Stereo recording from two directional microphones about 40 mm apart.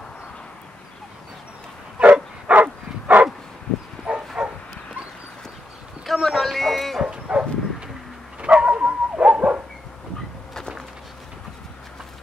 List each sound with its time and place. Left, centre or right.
2.0 s bow-wow: right
2.4 s bow-wow: right
4.1 s bow-wow: right
6.0 s a sound: centre
7.1 s bow-wow: right
8.4 s dog: right